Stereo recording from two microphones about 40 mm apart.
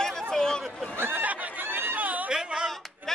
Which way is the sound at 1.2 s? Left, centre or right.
Right.